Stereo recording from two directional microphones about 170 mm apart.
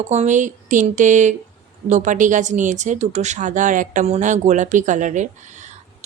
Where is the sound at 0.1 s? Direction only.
45° right (ahead or behind).